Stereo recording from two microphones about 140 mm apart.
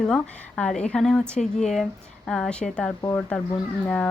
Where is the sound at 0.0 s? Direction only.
5° left (ahead or behind).